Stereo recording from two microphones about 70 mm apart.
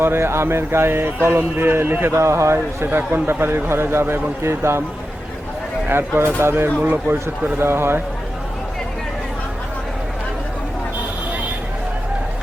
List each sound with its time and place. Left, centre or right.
0.0 s speech: right
5.9 s speech: right